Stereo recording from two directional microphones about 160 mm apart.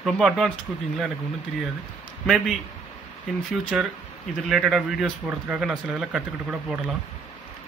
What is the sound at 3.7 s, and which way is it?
Speech, centre (ahead or behind).